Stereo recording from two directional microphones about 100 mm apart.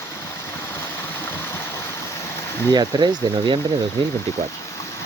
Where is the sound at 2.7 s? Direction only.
45° right (ahead or behind).